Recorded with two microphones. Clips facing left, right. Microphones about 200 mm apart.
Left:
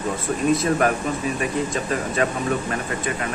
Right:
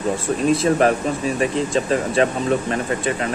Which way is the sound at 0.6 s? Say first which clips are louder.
Right 4 dB; 30° right (ahead or behind).